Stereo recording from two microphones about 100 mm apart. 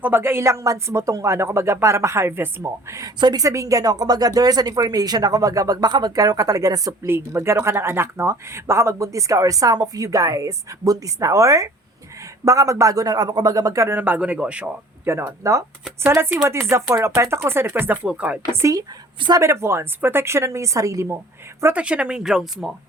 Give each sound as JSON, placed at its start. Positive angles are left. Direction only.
{"t": 0.0, "sound": "speech", "side_deg": -20}
{"t": 3.0, "sound": "speech", "side_deg": -45}
{"t": 7.1, "sound": "speech", "side_deg": -25}
{"t": 13.9, "sound": "speech", "side_deg": -20}
{"t": 15.0, "sound": "speech", "side_deg": -25}
{"t": 18.5, "sound": "speech", "side_deg": -35}
{"t": 21.6, "sound": "speech", "side_deg": -15}